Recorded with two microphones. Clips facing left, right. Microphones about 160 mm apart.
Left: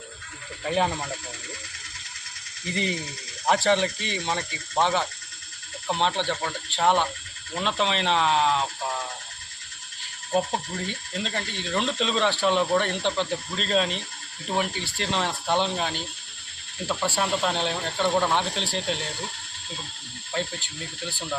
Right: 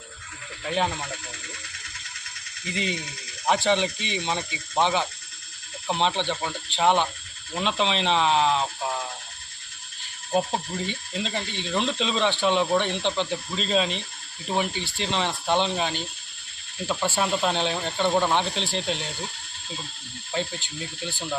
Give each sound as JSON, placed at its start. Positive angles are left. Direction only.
{"t": 0.6, "sound": "speech", "side_deg": 0}
{"t": 3.4, "sound": "speech", "side_deg": 0}
{"t": 10.3, "sound": "speech", "side_deg": -5}
{"t": 20.3, "sound": "speech", "side_deg": 0}